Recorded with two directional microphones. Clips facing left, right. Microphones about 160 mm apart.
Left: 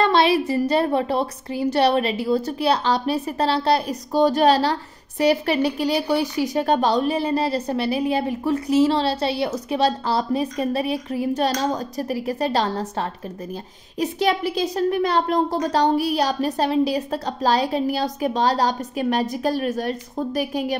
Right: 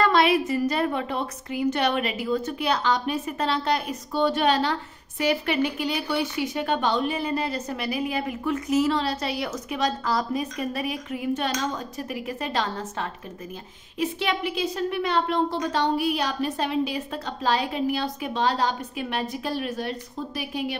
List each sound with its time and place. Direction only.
0.0 s speech: 30° left (ahead or behind)